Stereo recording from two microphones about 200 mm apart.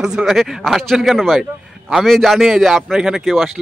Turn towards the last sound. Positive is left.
turn(degrees=0)  # may be behind; listen again after turning